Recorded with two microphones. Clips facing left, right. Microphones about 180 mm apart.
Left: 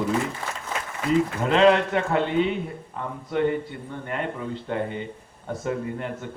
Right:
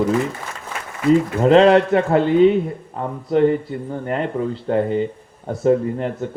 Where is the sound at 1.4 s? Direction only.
35° right (ahead or behind).